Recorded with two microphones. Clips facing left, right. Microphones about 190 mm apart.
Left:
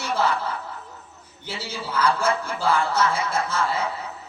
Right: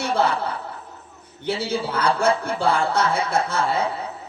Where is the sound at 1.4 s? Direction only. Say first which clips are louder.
Right 9 dB; 60° right (ahead or behind).